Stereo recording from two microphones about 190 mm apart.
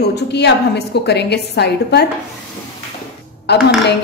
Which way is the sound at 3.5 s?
60° left (ahead or behind).